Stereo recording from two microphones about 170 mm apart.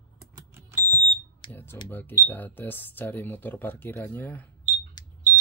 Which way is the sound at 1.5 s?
10° left (ahead or behind).